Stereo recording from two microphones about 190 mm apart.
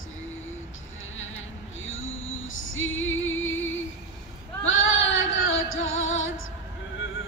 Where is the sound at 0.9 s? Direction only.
90° left.